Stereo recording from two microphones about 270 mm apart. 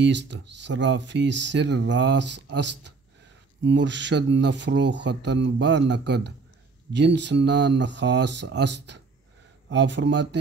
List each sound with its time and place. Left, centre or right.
0.0 s speech: right